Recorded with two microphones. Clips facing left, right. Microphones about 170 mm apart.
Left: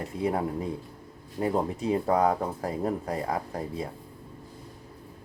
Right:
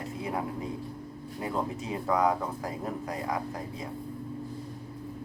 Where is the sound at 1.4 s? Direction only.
35° left (ahead or behind).